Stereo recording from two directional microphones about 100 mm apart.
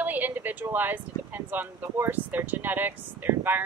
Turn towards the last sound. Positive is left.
turn(degrees=-20)  # may be behind; listen again after turning